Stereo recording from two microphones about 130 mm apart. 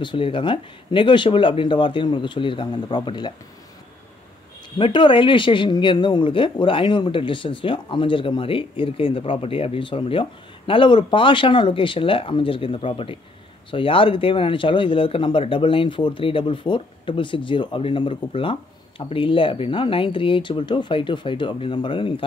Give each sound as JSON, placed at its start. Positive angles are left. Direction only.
{"t": 0.0, "sound": "speech", "side_deg": 40}
{"t": 4.7, "sound": "speech", "side_deg": 40}